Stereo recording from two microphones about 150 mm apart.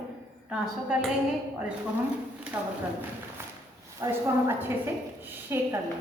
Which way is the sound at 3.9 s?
20° right (ahead or behind).